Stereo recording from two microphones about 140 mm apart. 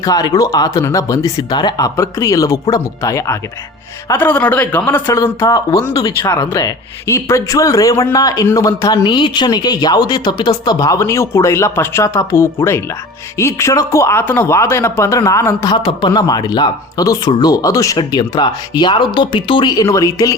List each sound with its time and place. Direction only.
0.0 s speech: 25° left (ahead or behind)
15.7 s speech: 35° left (ahead or behind)